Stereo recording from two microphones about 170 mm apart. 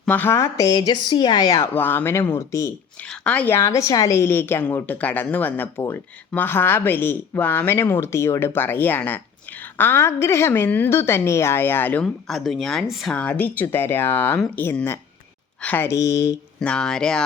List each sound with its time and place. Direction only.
0.0 s a woman's voice: 10° left (ahead or behind)
16.6 s speech: 5° left (ahead or behind)